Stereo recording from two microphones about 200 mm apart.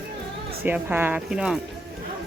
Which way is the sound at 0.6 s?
10° right (ahead or behind).